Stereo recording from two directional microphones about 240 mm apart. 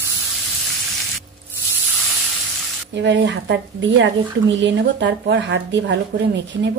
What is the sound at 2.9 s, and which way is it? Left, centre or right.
Speech, right.